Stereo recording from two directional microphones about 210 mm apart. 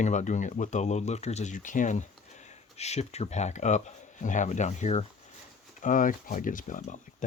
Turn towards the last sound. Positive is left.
turn(degrees=35)  # may be behind; listen again after turning